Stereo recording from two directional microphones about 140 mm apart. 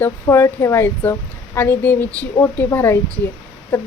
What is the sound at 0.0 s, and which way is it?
Speech, 20° left (ahead or behind).